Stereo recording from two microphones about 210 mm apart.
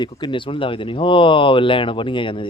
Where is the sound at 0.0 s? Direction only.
20° left (ahead or behind).